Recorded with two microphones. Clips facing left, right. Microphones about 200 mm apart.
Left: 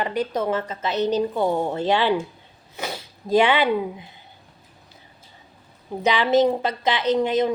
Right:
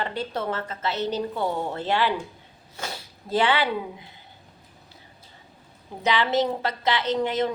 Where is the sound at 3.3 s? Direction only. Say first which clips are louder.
Left 5 dB; 15° left (ahead or behind).